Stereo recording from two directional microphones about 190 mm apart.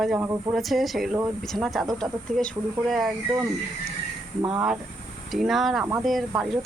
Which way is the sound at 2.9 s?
Centre (ahead or behind).